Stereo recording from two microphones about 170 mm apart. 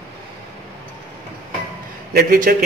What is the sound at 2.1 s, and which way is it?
Speech, 60° right (ahead or behind).